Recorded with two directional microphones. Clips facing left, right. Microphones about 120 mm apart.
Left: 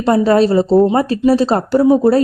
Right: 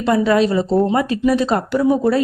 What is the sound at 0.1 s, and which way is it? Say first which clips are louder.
Speech: left 4 dB; 35° left (ahead or behind).